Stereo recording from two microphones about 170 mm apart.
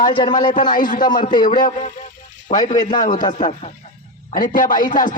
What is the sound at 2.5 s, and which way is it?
A man's voice, 40° left (ahead or behind).